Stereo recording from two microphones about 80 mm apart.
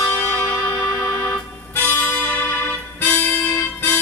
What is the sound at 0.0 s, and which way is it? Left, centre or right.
Music, left.